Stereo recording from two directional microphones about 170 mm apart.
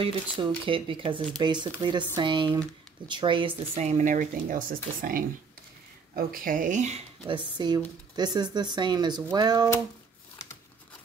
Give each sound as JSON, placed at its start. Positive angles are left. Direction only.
{"t": 0.0, "sound": "speech", "side_deg": -30}
{"t": 6.1, "sound": "speech", "side_deg": -55}
{"t": 7.2, "sound": "speech", "side_deg": -30}